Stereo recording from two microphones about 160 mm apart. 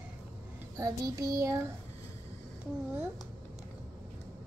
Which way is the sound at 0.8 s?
20° right (ahead or behind).